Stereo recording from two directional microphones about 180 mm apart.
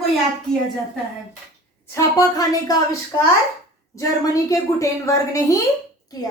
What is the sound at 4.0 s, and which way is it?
A woman's voice, 20° left (ahead or behind).